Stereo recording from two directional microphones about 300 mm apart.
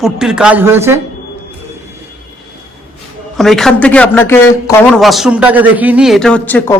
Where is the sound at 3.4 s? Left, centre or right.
Centre.